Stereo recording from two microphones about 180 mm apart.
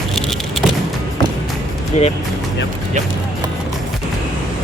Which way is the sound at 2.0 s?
40° left (ahead or behind).